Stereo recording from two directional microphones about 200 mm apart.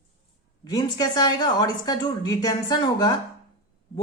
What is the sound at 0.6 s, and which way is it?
A woman's voice, 20° left (ahead or behind).